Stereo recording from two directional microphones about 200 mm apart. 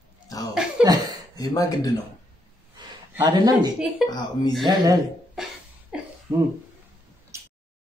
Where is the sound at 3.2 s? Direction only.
20° right (ahead or behind).